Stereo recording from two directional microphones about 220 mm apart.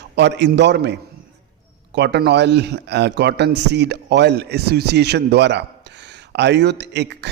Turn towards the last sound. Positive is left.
turn(degrees=-50)  # may be behind; listen again after turning